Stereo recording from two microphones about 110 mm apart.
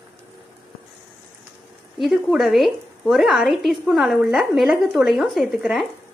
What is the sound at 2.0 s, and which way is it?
Speech, centre (ahead or behind).